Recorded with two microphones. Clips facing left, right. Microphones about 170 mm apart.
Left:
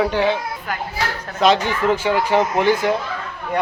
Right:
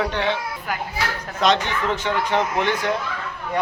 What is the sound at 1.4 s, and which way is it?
Speech, 5° left (ahead or behind).